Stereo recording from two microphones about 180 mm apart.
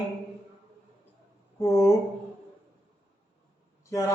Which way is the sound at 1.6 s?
15° left (ahead or behind).